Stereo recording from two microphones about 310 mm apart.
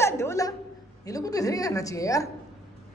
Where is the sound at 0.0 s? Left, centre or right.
Centre.